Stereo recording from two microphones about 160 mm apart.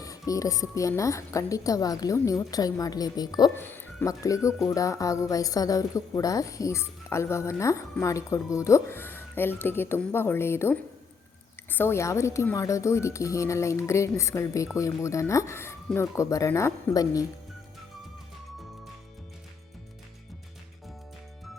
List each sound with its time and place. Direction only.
0.0 s a woman's voice: 20° left (ahead or behind)
3.5 s a woman's voice: 15° left (ahead or behind)